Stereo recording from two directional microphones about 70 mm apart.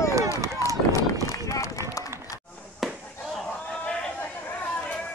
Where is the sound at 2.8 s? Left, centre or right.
Centre.